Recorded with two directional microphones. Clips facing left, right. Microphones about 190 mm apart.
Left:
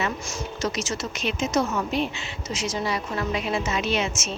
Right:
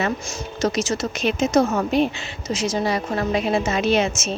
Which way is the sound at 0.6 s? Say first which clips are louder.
Right 7 dB; 40° right (ahead or behind).